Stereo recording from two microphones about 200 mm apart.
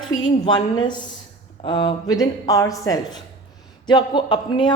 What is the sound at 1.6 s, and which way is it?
A woman's voice, 25° left (ahead or behind).